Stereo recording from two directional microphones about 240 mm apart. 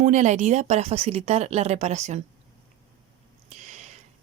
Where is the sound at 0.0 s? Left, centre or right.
Right.